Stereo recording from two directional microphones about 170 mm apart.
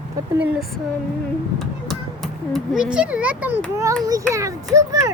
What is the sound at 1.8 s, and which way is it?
A child's voice, centre (ahead or behind).